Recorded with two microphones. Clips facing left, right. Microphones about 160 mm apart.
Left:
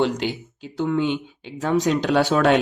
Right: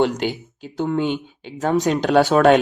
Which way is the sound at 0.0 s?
50° right (ahead or behind).